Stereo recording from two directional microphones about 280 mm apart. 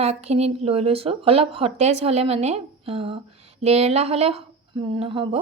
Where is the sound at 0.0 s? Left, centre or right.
Right.